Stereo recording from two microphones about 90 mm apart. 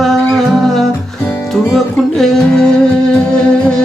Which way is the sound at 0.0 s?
Centre (ahead or behind).